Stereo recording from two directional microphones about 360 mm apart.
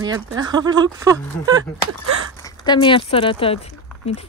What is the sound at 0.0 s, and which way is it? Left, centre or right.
Speech, centre.